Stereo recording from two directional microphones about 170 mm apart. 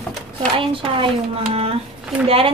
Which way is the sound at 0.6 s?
30° right (ahead or behind).